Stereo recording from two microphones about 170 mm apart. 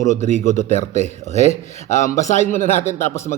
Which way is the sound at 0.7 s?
45° left (ahead or behind).